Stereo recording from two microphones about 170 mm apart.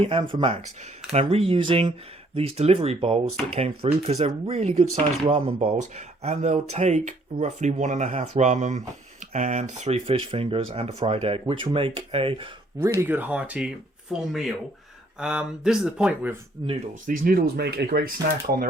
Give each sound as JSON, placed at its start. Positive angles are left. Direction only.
{"t": 0.0, "sound": "speech", "side_deg": -30}
{"t": 12.8, "sound": "speech", "side_deg": -15}
{"t": 16.6, "sound": "speech", "side_deg": -25}
{"t": 16.9, "sound": "speech", "side_deg": -55}